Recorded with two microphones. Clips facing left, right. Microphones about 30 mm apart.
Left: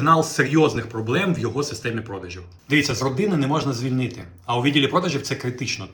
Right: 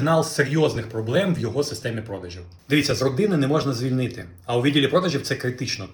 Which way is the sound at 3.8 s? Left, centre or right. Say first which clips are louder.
Even; centre.